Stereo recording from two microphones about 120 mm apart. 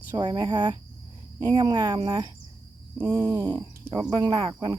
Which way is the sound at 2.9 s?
25° right (ahead or behind).